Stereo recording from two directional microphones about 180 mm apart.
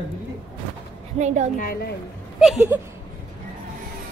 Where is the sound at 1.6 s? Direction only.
60° left (ahead or behind).